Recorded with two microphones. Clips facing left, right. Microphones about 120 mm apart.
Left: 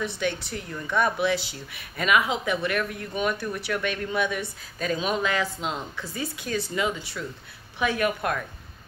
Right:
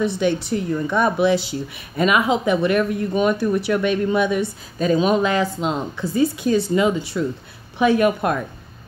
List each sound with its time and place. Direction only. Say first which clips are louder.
0.0 s speech: right 9 dB; 20° right (ahead or behind)